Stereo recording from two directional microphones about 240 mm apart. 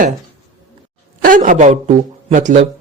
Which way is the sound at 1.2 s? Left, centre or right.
Right.